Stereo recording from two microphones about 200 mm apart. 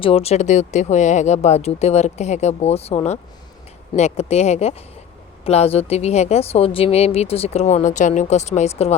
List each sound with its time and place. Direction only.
0.0 s a woman's voice: 30° left (ahead or behind)